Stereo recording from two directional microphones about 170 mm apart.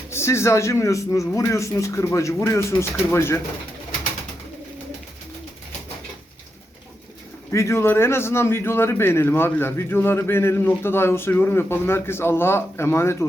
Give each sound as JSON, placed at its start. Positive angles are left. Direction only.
{"t": 0.1, "sound": "a man's voice", "side_deg": 15}
{"t": 7.5, "sound": "a man's voice", "side_deg": 15}